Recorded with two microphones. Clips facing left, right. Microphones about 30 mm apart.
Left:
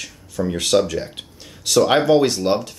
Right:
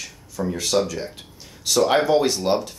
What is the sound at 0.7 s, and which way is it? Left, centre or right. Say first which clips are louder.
Speech: left 4 dB; centre.